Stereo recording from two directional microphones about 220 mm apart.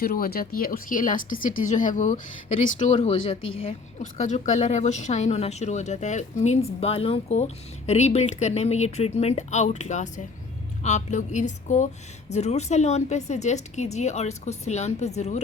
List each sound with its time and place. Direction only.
0.0 s speech: 40° left (ahead or behind)